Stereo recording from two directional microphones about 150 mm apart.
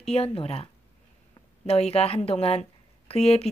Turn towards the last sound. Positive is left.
turn(degrees=45)  # may be behind; listen again after turning